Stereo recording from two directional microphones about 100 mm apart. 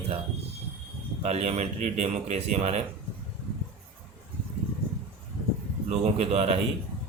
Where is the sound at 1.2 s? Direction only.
90° right.